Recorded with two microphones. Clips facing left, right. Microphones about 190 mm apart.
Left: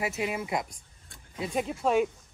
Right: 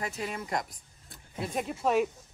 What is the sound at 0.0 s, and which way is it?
Speech, 10° left (ahead or behind).